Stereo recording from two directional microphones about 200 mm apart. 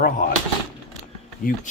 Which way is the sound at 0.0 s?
45° left (ahead or behind).